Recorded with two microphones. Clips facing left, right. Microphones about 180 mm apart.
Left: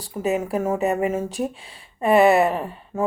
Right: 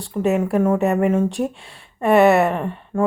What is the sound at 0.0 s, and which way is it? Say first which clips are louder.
A woman's voice: right 4 dB; centre (ahead or behind).